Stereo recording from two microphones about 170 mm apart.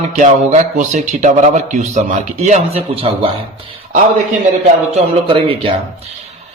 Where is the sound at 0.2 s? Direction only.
45° right (ahead or behind).